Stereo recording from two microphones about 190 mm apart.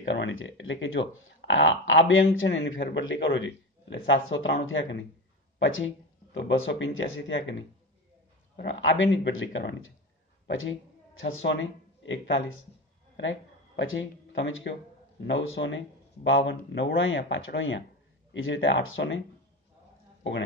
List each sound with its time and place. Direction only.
0.0 s speech: 80° left
8.5 s a man's voice: 70° left (ahead or behind)
10.4 s a woman's voice: 90° left
12.0 s a man's voice: 75° left (ahead or behind)
18.3 s speech: 90° left